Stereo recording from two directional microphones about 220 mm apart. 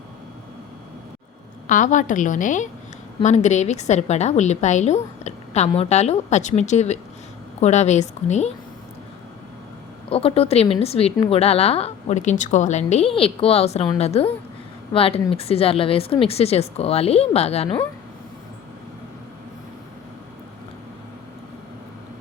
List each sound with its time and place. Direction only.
1.6 s a woman's voice: 35° left (ahead or behind)
10.1 s a woman's voice: 25° left (ahead or behind)